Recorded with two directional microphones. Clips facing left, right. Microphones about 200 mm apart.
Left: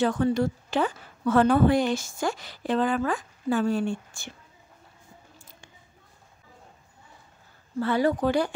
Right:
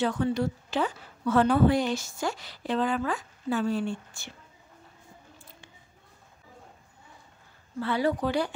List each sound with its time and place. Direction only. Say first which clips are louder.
0.0 s a woman's voice: left 3 dB; 45° left (ahead or behind)
5.4 s a sound: right 1 dB; 45° left (ahead or behind)
7.8 s a woman's voice: left 3 dB; 45° left (ahead or behind)